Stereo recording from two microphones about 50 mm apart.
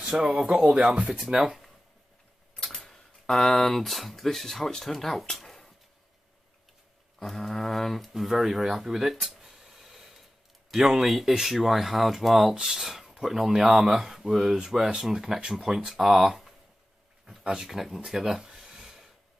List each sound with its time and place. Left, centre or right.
0.1 s speech: centre
1.2 s speech: centre
2.7 s speech: centre
5.3 s a sound: centre
7.2 s speech: centre
17.3 s a sound: centre